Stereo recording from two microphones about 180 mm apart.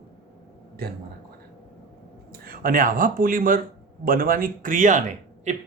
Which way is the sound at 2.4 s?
50° right (ahead or behind).